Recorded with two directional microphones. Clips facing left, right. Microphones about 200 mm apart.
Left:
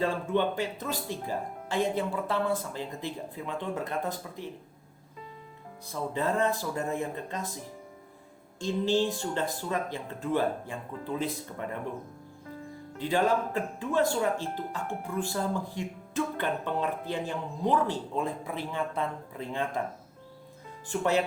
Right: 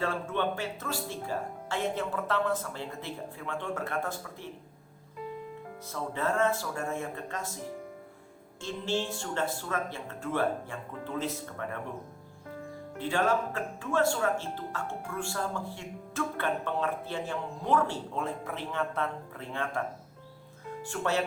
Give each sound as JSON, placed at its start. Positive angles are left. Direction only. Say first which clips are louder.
{"t": 0.0, "sound": "speech", "louder": "left 3 dB", "side_deg": 15}
{"t": 5.9, "sound": "speech", "louder": "left 2 dB", "side_deg": 15}
{"t": 8.6, "sound": "speech", "louder": "left 6 dB", "side_deg": 15}
{"t": 13.0, "sound": "speech", "louder": "left 2 dB", "side_deg": 15}